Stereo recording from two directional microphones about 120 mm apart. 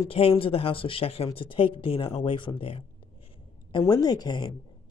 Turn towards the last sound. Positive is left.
turn(degrees=40)  # may be behind; listen again after turning